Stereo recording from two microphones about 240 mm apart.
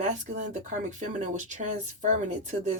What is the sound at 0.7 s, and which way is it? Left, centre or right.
Speech, right.